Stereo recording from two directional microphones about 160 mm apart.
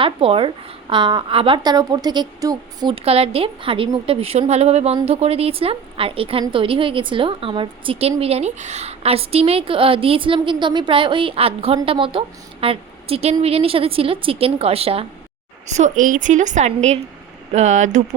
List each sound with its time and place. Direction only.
0.0 s a woman's voice: 35° right (ahead or behind)
2.9 s a woman's voice: 40° right (ahead or behind)
15.8 s a woman's voice: 55° right (ahead or behind)